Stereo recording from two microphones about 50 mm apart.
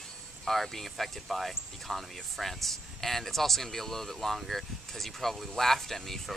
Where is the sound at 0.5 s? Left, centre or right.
Centre.